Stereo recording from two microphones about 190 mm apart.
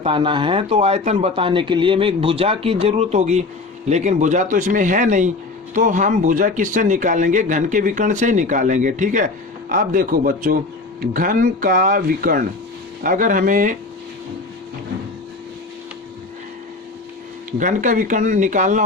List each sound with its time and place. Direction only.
0.0 s a man's voice: 25° right (ahead or behind); by 13.7 s 45° right (ahead or behind)
17.6 s a man's voice: 40° right (ahead or behind)